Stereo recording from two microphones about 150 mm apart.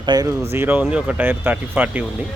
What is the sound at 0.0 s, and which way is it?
Speech, 25° right (ahead or behind).